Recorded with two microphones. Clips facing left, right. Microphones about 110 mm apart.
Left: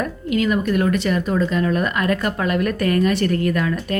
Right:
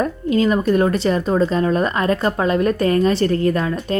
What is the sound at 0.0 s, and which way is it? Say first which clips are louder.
Speech: right 3 dB; 30° right (ahead or behind).